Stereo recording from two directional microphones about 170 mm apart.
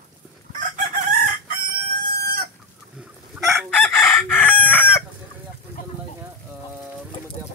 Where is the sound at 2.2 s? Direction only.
65° right (ahead or behind).